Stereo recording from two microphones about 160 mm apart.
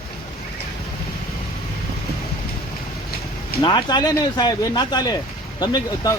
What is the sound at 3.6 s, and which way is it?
Speech, 30° left (ahead or behind).